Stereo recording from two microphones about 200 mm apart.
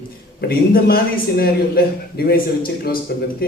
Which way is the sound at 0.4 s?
50° left (ahead or behind).